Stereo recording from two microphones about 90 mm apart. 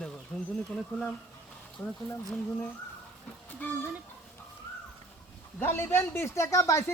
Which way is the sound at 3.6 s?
20° left (ahead or behind).